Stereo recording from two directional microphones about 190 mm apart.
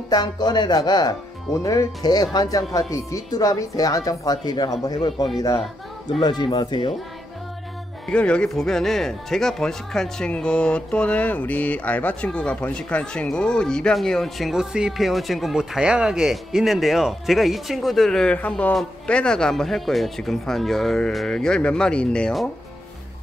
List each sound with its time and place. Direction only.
0.1 s a woman's voice: 20° left (ahead or behind)
8.1 s speech: 5° left (ahead or behind)